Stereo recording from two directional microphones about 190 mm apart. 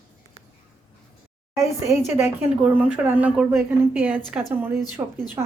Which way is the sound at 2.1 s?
15° right (ahead or behind).